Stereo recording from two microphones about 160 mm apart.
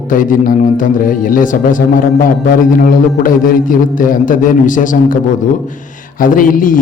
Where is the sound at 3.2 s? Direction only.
55° left (ahead or behind).